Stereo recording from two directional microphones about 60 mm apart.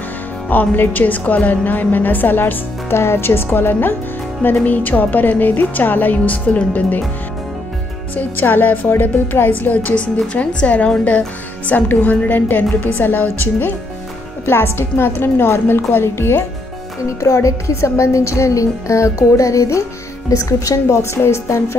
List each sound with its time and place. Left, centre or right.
0.5 s speech: left
2.9 s a woman's voice: left
8.2 s speech: left
14.4 s a woman's voice: left
17.2 s speech: left